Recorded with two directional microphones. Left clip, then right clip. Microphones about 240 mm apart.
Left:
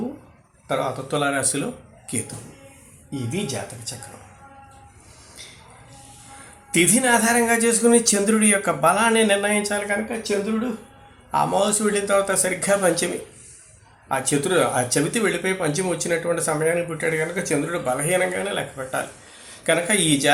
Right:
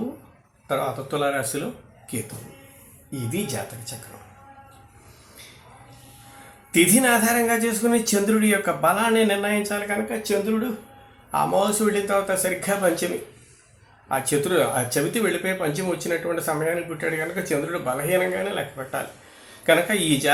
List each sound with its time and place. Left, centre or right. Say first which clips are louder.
0.7 s speech: left 1 dB; centre
3.4 s speech: left 1 dB; centre
6.7 s speech: even; centre
14.1 s speech: left 1 dB; centre
19.6 s speech: right 1 dB; centre